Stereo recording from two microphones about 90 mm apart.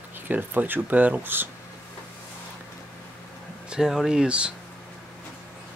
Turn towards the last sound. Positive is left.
turn(degrees=-10)  # may be behind; listen again after turning